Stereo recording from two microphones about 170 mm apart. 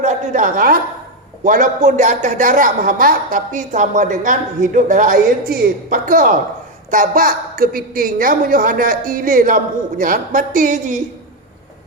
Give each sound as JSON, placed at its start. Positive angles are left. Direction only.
{"t": 0.0, "sound": "a woman's voice", "side_deg": -50}